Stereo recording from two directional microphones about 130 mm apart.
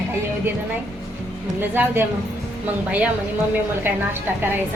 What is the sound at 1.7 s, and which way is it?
Speech, 15° right (ahead or behind).